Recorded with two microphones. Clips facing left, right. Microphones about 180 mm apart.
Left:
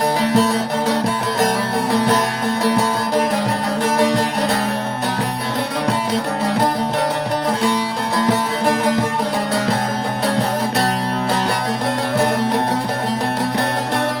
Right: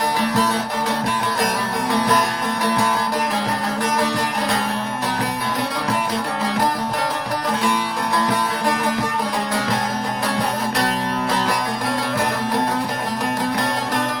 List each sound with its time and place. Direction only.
0.3 s music: 25° left (ahead or behind)
1.9 s music: 25° left (ahead or behind)
8.3 s music: 25° left (ahead or behind)